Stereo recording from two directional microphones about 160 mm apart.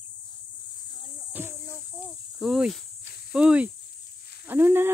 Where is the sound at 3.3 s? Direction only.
5° right (ahead or behind).